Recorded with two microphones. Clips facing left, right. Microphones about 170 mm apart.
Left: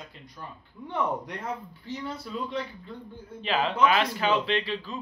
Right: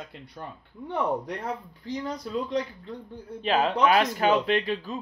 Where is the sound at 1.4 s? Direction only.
35° right (ahead or behind).